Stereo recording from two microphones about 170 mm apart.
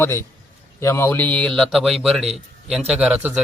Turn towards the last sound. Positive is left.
turn(degrees=-5)  # may be behind; listen again after turning